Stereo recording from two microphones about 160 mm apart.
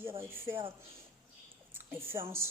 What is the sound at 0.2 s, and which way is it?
Speech, 15° right (ahead or behind).